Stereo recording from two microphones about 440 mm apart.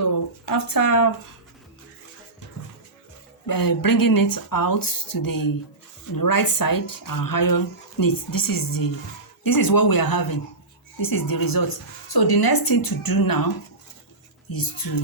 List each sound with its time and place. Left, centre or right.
0.0 s a sound: left
3.4 s speech: left
14.5 s speech: left